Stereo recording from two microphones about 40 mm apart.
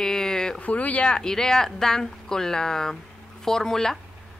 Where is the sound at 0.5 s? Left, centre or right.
Left; by 4.0 s centre.